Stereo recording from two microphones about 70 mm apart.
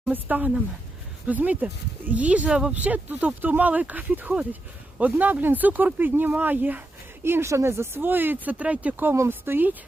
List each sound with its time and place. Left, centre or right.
0.1 s speech: right
7.3 s speech: right
9.1 s speech: right
9.4 s speech: right